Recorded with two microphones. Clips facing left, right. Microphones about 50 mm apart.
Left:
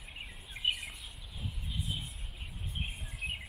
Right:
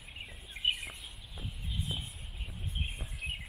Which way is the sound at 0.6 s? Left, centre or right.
Centre.